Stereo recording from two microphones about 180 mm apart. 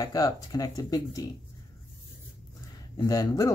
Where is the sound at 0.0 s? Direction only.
20° left (ahead or behind).